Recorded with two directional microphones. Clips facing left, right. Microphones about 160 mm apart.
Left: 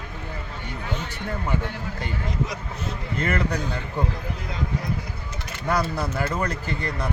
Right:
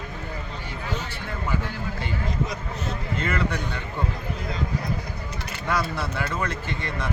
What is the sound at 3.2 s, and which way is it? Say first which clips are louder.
Speech: left 2 dB; 40° left (ahead or behind).